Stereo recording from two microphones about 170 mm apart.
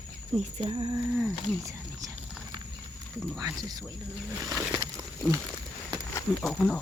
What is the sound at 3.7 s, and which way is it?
Speech, 20° right (ahead or behind).